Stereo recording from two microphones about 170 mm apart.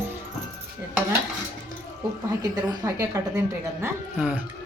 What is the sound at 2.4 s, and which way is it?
A woman's voice, 20° right (ahead or behind).